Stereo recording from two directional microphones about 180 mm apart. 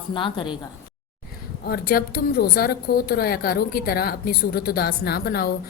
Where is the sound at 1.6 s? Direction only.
60° left (ahead or behind).